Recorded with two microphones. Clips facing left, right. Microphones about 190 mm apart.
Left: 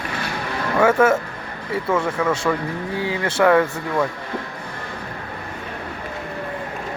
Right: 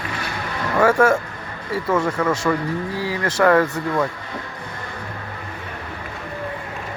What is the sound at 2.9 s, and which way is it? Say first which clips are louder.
Speech: left 1 dB; 25° left (ahead or behind).